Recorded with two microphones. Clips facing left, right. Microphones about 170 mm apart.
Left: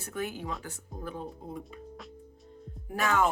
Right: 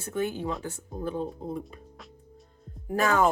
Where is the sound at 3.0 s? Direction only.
35° right (ahead or behind).